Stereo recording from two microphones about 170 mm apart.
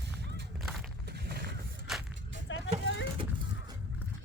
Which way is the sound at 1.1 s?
75° right (ahead or behind).